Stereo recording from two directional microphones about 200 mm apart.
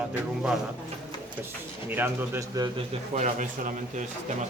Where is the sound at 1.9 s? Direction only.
10° right (ahead or behind).